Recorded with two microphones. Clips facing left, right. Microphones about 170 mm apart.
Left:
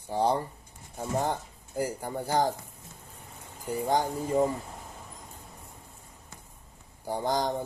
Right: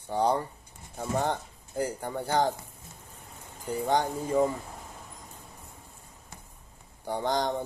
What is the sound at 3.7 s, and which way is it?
Speech, 10° left (ahead or behind).